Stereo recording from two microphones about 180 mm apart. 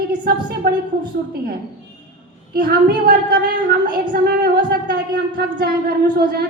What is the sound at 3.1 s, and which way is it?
A woman's voice, 55° right (ahead or behind).